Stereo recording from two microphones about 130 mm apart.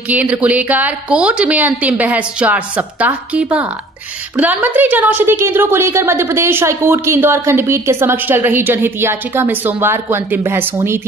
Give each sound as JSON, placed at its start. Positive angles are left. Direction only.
{"t": 0.1, "sound": "a woman's voice", "side_deg": -10}